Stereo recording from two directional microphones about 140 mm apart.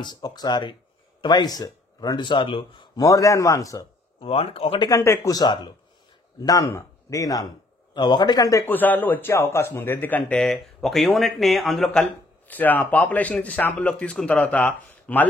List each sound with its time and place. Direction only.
0.0 s speech: 30° left (ahead or behind)
3.0 s a man's voice: 25° left (ahead or behind)
4.2 s speech: 45° left (ahead or behind)
4.8 s a man's voice: 20° left (ahead or behind); by 12.1 s centre (ahead or behind)
12.4 s a man's voice: 10° left (ahead or behind)